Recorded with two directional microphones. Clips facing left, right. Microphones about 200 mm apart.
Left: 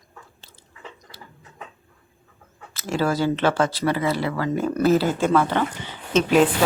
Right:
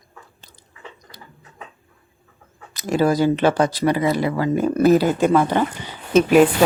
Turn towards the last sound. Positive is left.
turn(degrees=-10)  # may be behind; listen again after turning